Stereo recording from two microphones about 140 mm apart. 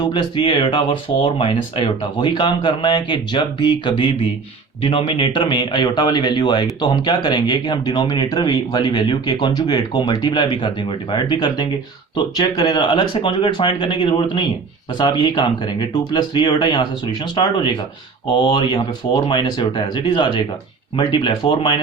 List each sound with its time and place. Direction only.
0.0 s speech: 35° left (ahead or behind)